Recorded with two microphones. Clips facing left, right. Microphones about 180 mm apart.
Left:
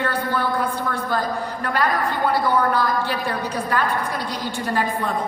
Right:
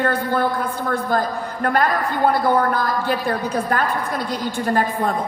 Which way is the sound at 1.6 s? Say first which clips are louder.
Right 3 dB; 50° right (ahead or behind).